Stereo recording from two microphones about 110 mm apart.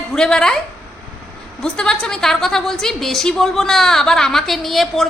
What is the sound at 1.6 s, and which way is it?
A woman's voice, 5° left (ahead or behind).